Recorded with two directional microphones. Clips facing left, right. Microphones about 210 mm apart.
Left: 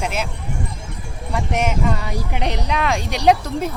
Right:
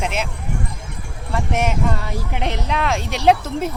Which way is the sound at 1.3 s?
Centre (ahead or behind).